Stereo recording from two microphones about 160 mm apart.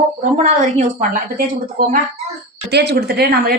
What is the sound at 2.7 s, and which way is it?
Speech, 90° right.